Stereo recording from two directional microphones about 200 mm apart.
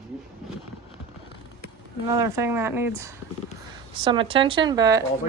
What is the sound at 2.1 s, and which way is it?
Speech, 15° right (ahead or behind).